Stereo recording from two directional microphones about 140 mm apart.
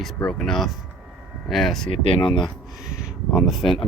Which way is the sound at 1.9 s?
40° left (ahead or behind).